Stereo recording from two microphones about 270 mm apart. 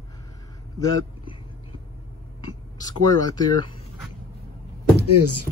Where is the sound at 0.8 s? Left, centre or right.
Centre.